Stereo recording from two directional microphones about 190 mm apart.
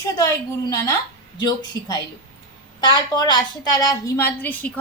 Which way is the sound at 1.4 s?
20° left (ahead or behind).